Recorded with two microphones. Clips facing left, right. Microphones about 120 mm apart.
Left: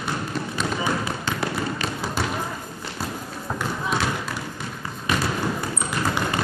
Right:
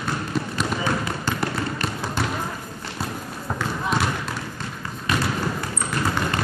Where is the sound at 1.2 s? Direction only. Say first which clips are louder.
Right 1 dB; 5° right (ahead or behind).